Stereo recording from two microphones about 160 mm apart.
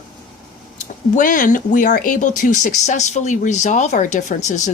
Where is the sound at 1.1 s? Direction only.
55° left (ahead or behind).